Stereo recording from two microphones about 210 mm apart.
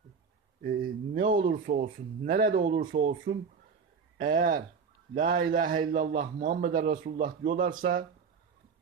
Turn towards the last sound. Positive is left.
turn(degrees=-40)  # may be behind; listen again after turning